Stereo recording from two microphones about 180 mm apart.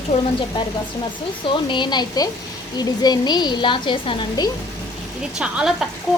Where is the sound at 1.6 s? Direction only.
25° left (ahead or behind).